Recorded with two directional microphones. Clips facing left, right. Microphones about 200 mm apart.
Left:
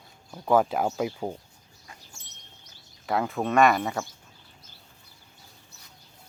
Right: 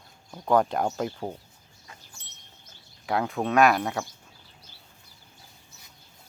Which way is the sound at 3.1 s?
Centre (ahead or behind).